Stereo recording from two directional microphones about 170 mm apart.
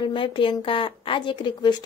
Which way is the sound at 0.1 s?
30° left (ahead or behind).